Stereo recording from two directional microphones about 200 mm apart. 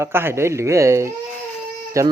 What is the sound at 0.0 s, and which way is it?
Speech, 10° right (ahead or behind).